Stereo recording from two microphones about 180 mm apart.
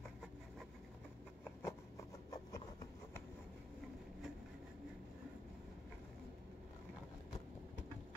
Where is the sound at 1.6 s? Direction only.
15° left (ahead or behind).